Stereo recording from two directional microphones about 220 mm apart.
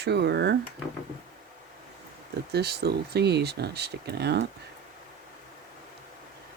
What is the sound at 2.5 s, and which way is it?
Speech, 50° right (ahead or behind).